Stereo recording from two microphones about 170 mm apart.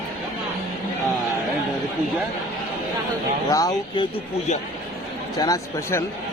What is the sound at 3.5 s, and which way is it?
Speech, 20° left (ahead or behind).